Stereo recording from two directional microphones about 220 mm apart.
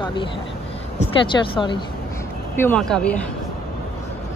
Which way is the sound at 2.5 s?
10° left (ahead or behind).